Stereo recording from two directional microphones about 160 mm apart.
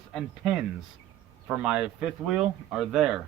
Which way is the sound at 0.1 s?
Centre (ahead or behind).